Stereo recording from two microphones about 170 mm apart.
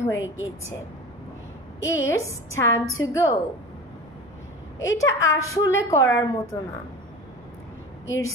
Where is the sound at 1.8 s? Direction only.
90° left.